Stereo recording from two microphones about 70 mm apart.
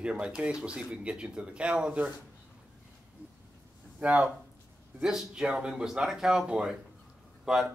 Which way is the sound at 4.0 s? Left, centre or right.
Centre.